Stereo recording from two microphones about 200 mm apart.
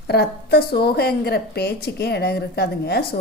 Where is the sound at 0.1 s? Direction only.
55° left (ahead or behind).